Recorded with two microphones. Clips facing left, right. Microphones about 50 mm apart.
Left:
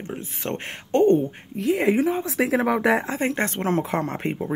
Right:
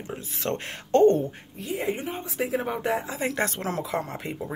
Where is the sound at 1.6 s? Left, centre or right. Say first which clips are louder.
Left 9 dB; left.